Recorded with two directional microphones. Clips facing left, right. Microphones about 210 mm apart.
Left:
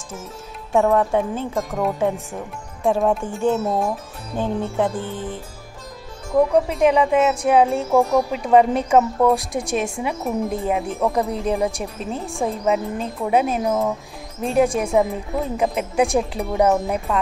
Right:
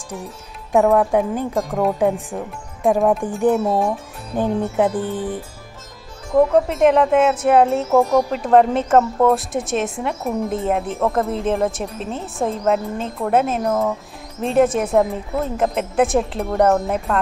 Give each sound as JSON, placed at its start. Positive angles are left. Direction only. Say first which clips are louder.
{"t": 0.7, "sound": "speech", "louder": "right 2 dB", "side_deg": -5}
{"t": 3.3, "sound": "speech", "louder": "right 4 dB", "side_deg": -15}
{"t": 3.6, "sound": "speech", "louder": "right 3 dB", "side_deg": 0}
{"t": 4.4, "sound": "speech", "louder": "right 3 dB", "side_deg": -20}
{"t": 6.3, "sound": "speech", "louder": "right 2 dB", "side_deg": 0}